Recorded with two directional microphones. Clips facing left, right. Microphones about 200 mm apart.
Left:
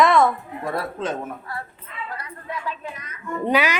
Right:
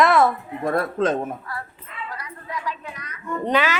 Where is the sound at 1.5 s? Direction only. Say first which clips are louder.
Left 1 dB; 25° left (ahead or behind).